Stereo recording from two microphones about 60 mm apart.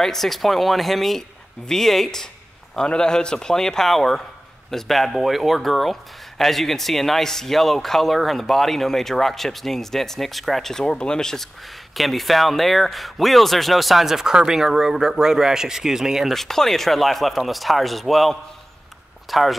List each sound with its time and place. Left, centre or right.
0.0 s speech: centre
16.3 s speech: centre